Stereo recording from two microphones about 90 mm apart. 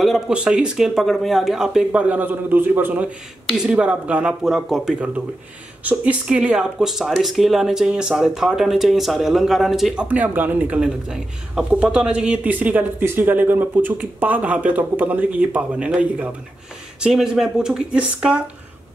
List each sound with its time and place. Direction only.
0.3 s speech: 10° right (ahead or behind)
3.5 s speech: 10° right (ahead or behind)
10.0 s speech: 20° right (ahead or behind)
10.8 s speech: 10° right (ahead or behind)
17.0 s speech: 5° right (ahead or behind)